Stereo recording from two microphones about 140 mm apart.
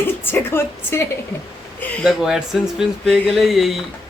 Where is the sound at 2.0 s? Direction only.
5° right (ahead or behind).